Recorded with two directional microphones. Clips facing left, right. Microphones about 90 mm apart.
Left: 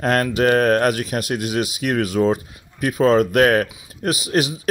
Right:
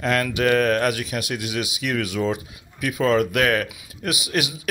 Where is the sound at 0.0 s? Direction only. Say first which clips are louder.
Left 4 dB; 40° left (ahead or behind).